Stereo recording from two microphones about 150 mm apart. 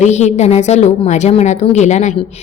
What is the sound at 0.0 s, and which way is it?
A woman's voice, 50° left (ahead or behind).